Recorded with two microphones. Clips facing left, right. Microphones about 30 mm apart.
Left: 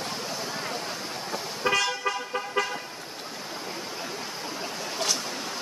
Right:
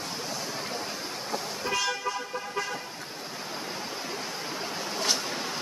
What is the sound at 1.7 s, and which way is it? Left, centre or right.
Vehicle, left.